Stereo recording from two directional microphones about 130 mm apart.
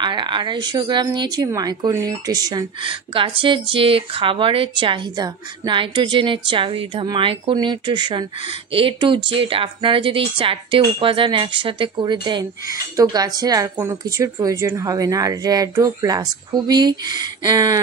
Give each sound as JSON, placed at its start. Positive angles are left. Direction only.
{"t": 0.0, "sound": "a woman's voice", "side_deg": -35}
{"t": 2.8, "sound": "a woman's voice", "side_deg": -40}